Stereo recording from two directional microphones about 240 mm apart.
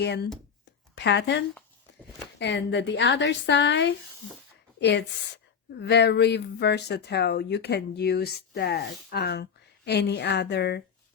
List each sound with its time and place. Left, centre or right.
0.0 s speech: left